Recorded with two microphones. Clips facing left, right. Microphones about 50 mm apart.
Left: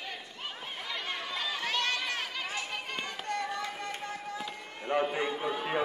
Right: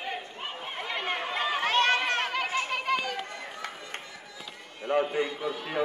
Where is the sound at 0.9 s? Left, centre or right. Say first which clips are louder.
Right 6 dB; right.